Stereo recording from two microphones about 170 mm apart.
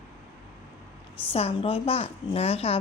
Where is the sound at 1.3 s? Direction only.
35° left (ahead or behind).